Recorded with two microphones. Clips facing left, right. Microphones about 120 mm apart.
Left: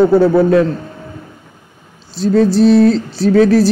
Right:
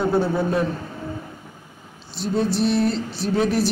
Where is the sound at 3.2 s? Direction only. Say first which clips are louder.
Left 12 dB; 90° left.